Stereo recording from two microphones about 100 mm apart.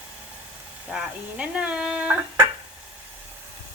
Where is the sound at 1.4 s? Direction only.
10° right (ahead or behind).